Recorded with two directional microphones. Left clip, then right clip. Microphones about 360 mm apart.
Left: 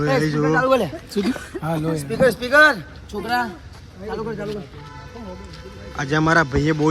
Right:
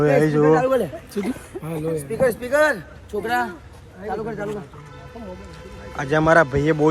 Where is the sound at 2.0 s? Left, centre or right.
Left.